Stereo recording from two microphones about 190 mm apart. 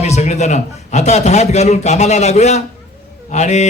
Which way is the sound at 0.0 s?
35° left (ahead or behind).